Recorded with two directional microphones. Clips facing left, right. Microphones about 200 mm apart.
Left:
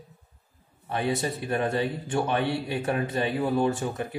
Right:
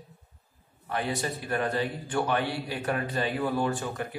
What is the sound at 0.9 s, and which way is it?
A man's voice, 20° left (ahead or behind).